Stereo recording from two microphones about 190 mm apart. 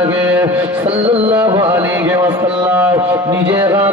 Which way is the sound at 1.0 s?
30° right (ahead or behind).